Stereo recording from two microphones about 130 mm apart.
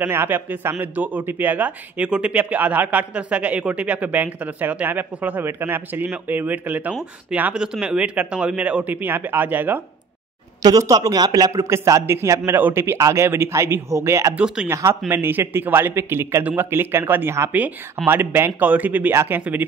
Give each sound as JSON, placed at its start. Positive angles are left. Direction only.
{"t": 0.0, "sound": "a man's voice", "side_deg": -15}
{"t": 10.6, "sound": "a man's voice", "side_deg": -30}
{"t": 14.3, "sound": "a man's voice", "side_deg": -10}
{"t": 14.7, "sound": "a man's voice", "side_deg": -20}